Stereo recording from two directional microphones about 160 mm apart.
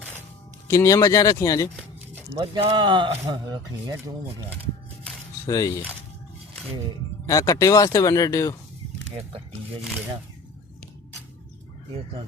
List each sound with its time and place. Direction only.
0.7 s speech: 20° left (ahead or behind)
2.3 s speech: 30° right (ahead or behind)
5.5 s speech: 20° left (ahead or behind)
7.3 s speech: 20° left (ahead or behind)
9.0 s speech: 40° right (ahead or behind)